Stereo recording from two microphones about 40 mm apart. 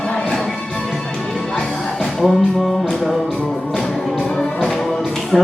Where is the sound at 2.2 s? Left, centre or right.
Centre.